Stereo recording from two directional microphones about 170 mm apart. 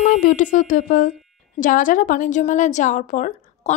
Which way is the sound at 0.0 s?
55° left (ahead or behind).